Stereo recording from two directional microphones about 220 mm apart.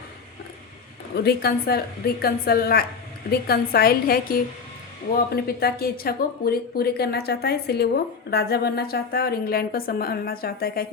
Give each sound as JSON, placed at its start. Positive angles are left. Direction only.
{"t": 1.1, "sound": "speech", "side_deg": 45}